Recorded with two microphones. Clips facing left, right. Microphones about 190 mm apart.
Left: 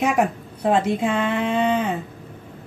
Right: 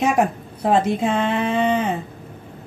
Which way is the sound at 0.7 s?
35° right (ahead or behind).